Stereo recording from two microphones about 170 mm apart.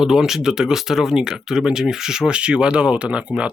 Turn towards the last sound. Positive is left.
turn(degrees=-5)  # may be behind; listen again after turning